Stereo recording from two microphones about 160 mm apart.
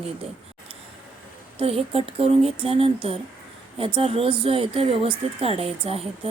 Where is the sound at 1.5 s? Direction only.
35° right (ahead or behind).